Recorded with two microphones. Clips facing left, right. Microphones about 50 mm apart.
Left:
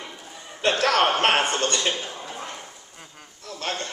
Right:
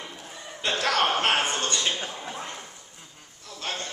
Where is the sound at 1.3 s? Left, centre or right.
Left.